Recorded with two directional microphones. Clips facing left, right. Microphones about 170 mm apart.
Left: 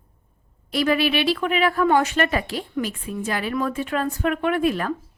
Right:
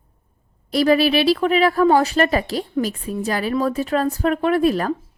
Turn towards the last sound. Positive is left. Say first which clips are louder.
# right 4 dB
turn(degrees=-35)  # may be behind; listen again after turning